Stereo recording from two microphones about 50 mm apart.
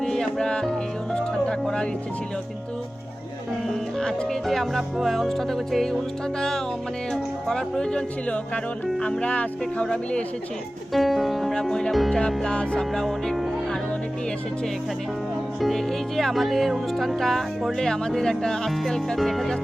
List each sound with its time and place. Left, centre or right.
0.0 s music: centre
3.7 s speech: centre
7.1 s speech: centre; by 9.8 s left
9.8 s speech: centre
10.9 s speech: centre
12.4 s speech: centre
12.9 s speech: centre
15.6 s speech: centre